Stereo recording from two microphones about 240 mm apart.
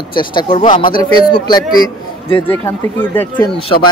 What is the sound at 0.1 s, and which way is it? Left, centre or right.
Speech, centre.